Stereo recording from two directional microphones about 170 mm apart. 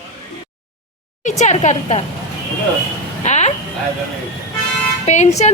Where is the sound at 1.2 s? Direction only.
45° left (ahead or behind).